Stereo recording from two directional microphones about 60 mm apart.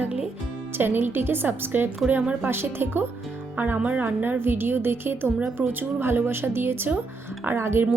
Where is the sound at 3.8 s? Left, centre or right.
Right.